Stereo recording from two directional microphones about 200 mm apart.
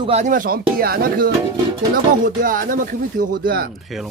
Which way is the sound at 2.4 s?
45° right (ahead or behind).